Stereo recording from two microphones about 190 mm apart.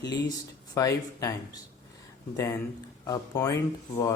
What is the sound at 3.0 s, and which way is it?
Speech, 20° left (ahead or behind).